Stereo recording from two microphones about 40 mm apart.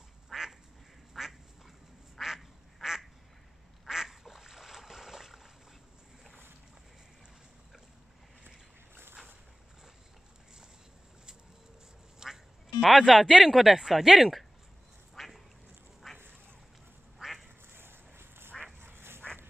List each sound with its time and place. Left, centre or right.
0.3 s duck: centre
12.2 s quack: centre
12.8 s speech: centre
15.1 s duck: centre
17.2 s quack: centre
17.7 s a sound: right
18.8 s duck: right